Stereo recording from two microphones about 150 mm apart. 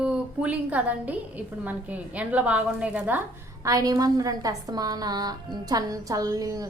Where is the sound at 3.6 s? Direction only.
25° right (ahead or behind).